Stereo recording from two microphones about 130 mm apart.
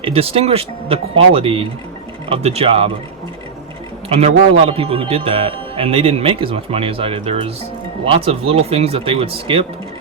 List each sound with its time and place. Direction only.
0.0 s speech: 50° right (ahead or behind)
4.1 s speech: 50° right (ahead or behind)